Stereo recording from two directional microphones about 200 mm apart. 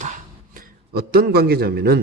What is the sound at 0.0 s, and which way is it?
A man's voice, 40° right (ahead or behind).